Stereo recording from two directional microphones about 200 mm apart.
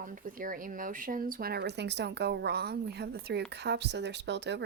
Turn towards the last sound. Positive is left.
turn(degrees=-60)  # may be behind; listen again after turning